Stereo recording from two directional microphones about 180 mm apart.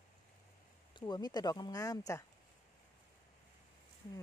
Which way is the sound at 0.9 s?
25° left (ahead or behind).